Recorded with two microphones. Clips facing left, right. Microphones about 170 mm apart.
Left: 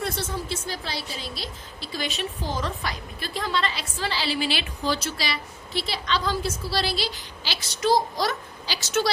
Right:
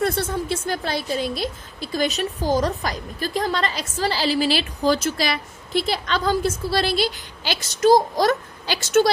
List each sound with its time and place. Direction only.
0.0 s a woman's voice: 55° right (ahead or behind)